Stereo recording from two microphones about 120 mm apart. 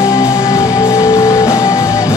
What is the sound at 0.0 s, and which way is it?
Music, 25° left (ahead or behind).